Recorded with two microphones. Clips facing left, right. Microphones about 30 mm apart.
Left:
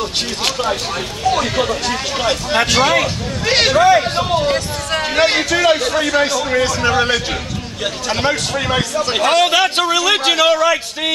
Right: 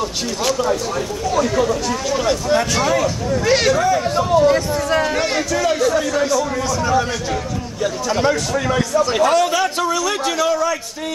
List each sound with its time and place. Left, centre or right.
0.0 s speech: left
9.1 s a man's voice: left